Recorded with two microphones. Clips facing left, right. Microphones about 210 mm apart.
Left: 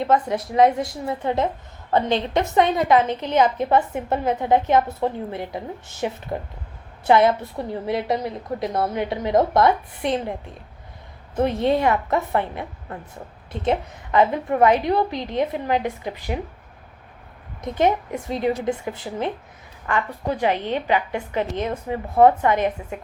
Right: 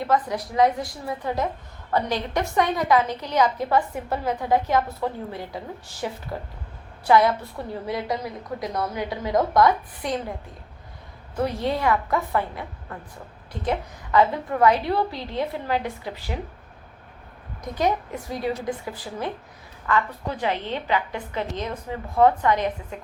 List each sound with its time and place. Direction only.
0.0 s a woman's voice: 25° left (ahead or behind)
11.3 s a woman's voice: 25° left (ahead or behind)
17.6 s a woman's voice: 25° left (ahead or behind)